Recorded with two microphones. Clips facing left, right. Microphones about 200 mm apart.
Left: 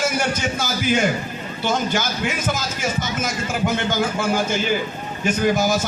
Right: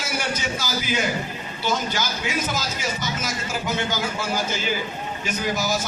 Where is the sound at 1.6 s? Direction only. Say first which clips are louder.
Left 3 dB; 50° left (ahead or behind).